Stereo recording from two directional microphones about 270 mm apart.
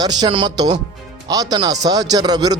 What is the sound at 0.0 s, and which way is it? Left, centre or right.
A man's voice, centre.